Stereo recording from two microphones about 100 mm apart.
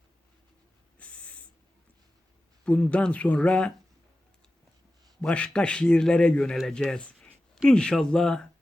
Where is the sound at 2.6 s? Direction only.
10° left (ahead or behind).